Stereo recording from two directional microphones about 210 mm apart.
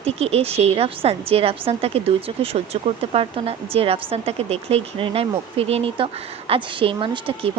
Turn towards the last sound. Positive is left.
turn(degrees=-25)  # may be behind; listen again after turning